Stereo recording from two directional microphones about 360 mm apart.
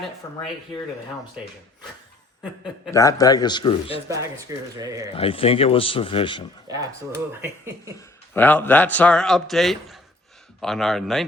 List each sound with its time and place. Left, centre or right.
2.4 s a man's voice: centre
4.1 s speech: centre
5.1 s a man's voice: centre
6.7 s speech: centre
7.9 s a man's voice: centre